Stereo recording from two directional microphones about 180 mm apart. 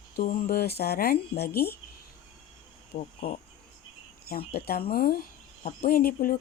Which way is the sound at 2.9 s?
55° left (ahead or behind).